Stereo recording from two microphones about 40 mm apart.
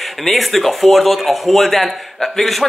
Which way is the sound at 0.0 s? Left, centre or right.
Centre.